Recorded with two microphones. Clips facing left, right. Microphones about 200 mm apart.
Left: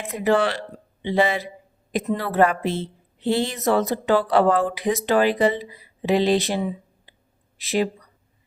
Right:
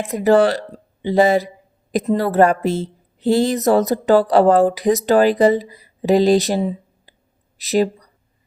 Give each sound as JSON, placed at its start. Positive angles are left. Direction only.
{"t": 0.0, "sound": "a woman's voice", "side_deg": -40}